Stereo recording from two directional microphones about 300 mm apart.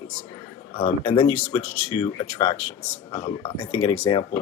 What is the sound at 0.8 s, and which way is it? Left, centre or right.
Speech, centre.